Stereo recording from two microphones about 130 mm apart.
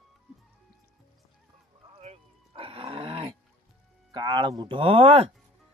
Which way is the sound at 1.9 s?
50° right (ahead or behind).